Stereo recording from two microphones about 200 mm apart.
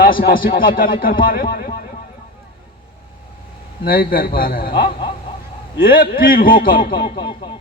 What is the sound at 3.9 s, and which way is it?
A man's voice, 45° left (ahead or behind).